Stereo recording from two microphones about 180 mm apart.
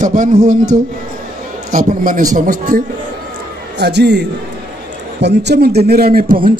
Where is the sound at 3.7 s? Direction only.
70° right (ahead or behind).